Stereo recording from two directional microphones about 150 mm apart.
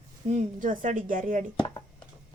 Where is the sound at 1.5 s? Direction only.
30° left (ahead or behind).